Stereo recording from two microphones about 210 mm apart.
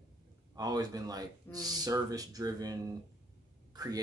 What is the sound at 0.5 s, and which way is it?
Speech, 20° right (ahead or behind).